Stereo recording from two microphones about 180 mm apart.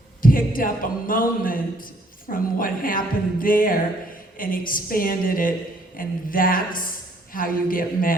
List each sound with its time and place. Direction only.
0.2 s a man's voice: 50° left (ahead or behind)